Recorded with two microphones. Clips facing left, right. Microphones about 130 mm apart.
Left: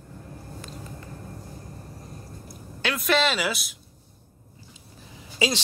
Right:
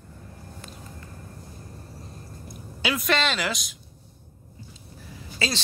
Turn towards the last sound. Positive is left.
turn(degrees=15)  # may be behind; listen again after turning